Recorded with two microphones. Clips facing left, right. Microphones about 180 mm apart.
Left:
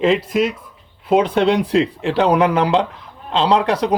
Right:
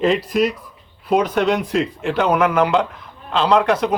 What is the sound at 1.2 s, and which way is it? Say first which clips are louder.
Speech: left 2 dB; 30° left (ahead or behind).